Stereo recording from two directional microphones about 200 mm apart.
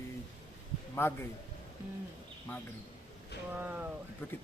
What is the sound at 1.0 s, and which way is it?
Speech, 10° left (ahead or behind).